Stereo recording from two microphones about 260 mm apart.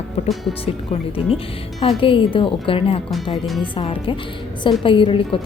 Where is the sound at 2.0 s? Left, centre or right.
Centre.